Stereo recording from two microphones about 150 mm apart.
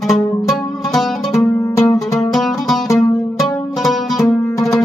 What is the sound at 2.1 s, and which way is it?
Music, centre (ahead or behind).